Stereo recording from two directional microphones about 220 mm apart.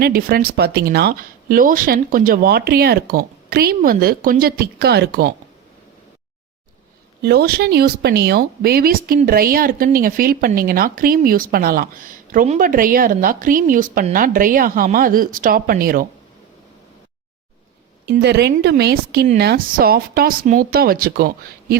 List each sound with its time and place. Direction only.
0.0 s speech: 45° right (ahead or behind)
7.2 s speech: 45° right (ahead or behind)
18.0 s speech: 50° right (ahead or behind)